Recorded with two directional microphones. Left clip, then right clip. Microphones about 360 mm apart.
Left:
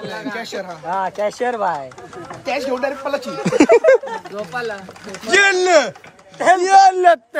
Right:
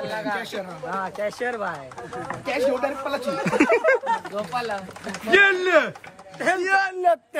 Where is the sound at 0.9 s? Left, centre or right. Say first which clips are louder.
Left 7 dB; left.